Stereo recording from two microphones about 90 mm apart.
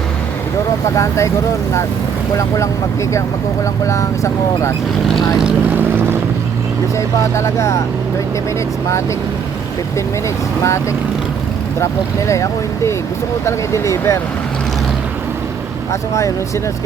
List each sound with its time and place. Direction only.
0.9 s speech: 35° left (ahead or behind)
3.8 s speech: 35° left (ahead or behind)
6.9 s speech: 30° left (ahead or behind)
10.6 s speech: 35° left (ahead or behind)
12.3 s speech: 35° left (ahead or behind)
15.9 s speech: 35° left (ahead or behind)